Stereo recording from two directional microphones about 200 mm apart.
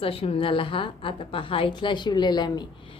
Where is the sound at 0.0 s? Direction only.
30° left (ahead or behind).